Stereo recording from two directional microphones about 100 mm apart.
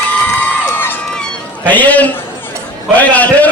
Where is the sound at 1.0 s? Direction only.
5° left (ahead or behind).